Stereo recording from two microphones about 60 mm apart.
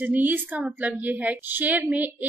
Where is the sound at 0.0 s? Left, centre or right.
Right.